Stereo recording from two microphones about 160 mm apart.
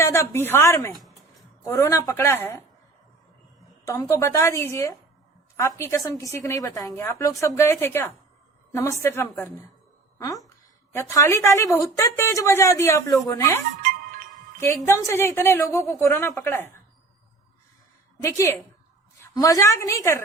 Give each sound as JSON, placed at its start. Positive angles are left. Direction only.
{"t": 0.0, "sound": "a woman's voice", "side_deg": 20}
{"t": 4.1, "sound": "a woman's voice", "side_deg": 20}
{"t": 10.9, "sound": "a woman's voice", "side_deg": 15}
{"t": 13.8, "sound": "music", "side_deg": -60}
{"t": 14.8, "sound": "a woman's voice", "side_deg": 15}
{"t": 18.2, "sound": "a woman's voice", "side_deg": 15}